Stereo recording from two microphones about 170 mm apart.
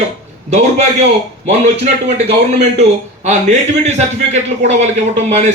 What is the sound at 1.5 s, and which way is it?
A man's voice, 40° right (ahead or behind).